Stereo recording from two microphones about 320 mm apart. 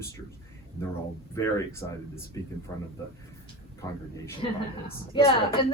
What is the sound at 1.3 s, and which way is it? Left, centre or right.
Speech, centre.